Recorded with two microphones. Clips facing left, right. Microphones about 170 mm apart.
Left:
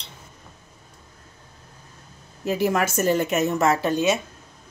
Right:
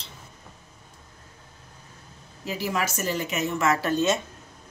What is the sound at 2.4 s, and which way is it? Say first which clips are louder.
A woman's voice: left 6 dB; 50° left (ahead or behind).